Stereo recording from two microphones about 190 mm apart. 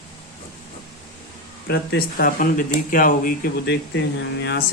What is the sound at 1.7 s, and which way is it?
Speech, 60° left (ahead or behind).